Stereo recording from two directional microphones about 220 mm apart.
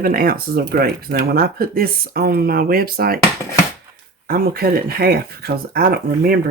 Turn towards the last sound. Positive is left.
turn(degrees=-45)  # may be behind; listen again after turning